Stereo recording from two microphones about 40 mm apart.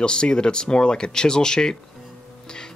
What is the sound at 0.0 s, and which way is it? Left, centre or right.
Speech, left.